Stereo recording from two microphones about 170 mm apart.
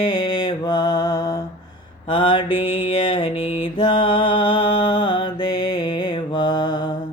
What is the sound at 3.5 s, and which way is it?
Mantra, 30° left (ahead or behind).